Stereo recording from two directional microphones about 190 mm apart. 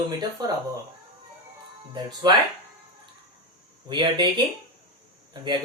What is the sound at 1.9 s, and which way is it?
Speech, 20° right (ahead or behind).